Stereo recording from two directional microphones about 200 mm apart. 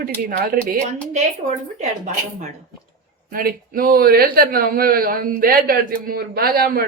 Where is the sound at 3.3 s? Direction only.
45° right (ahead or behind).